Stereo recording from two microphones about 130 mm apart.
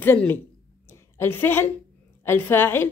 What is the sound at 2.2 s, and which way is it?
Speech, 15° left (ahead or behind).